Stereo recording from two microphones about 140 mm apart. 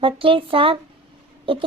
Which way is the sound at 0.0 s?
40° right (ahead or behind).